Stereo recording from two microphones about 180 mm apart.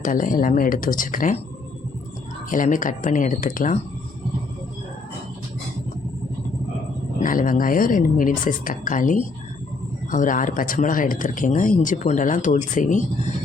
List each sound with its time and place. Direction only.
0.0 s speech: 50° left (ahead or behind)
2.5 s speech: 45° left (ahead or behind)
7.2 s speech: 50° left (ahead or behind)